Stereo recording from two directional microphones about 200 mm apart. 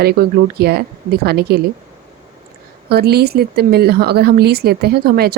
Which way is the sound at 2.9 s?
55° right (ahead or behind).